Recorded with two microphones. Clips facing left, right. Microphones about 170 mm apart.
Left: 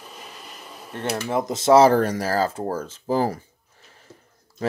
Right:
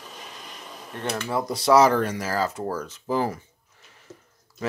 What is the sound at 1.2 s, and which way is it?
Speech, 20° left (ahead or behind).